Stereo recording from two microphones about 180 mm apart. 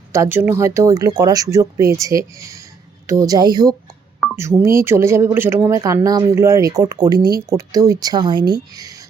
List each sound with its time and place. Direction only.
0.1 s speech: 15° right (ahead or behind)